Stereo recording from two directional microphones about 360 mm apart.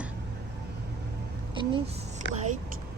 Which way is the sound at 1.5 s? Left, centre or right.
Centre.